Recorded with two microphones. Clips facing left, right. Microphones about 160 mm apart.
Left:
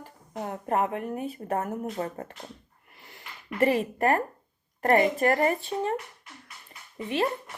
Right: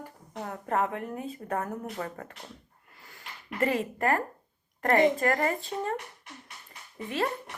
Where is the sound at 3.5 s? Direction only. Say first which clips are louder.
Left 4 dB; 20° left (ahead or behind).